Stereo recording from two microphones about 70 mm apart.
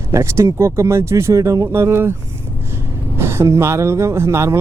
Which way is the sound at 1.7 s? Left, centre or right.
Right.